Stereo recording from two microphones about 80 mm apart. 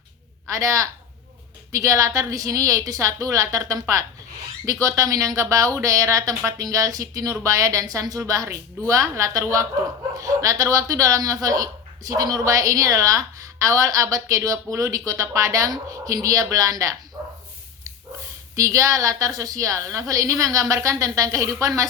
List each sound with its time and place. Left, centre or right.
0.4 s a man's voice: right
18.5 s speech: right